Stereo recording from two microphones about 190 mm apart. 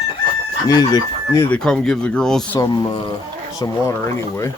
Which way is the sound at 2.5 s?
20° left (ahead or behind).